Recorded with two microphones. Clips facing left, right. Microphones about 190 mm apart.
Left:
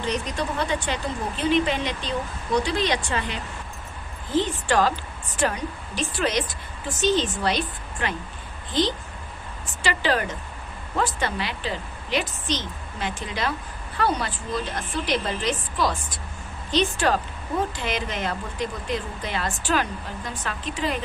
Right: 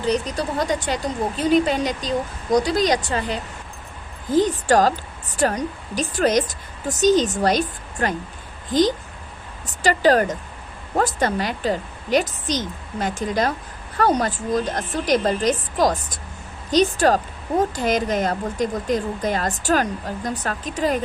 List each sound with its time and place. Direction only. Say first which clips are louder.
0.0 s speech: right 5 dB; 35° right (ahead or behind)